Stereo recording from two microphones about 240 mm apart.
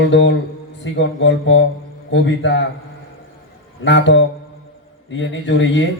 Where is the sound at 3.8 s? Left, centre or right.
Left.